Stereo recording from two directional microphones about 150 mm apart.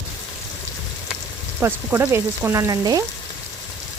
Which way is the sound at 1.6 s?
15° right (ahead or behind).